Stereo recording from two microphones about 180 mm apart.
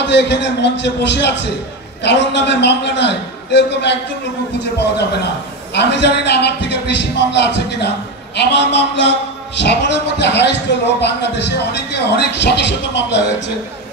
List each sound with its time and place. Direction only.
0.0 s speech: 75° left (ahead or behind)
5.8 s speech: 70° left (ahead or behind)